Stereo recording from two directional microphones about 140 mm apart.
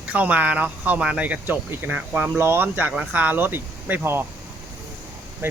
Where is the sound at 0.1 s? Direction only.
10° right (ahead or behind).